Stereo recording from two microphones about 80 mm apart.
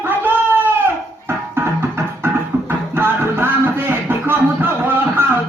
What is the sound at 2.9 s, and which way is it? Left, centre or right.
Music, right.